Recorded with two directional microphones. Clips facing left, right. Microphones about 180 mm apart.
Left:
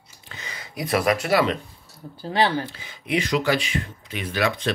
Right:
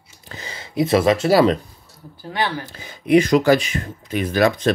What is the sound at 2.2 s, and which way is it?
Speech, 25° left (ahead or behind).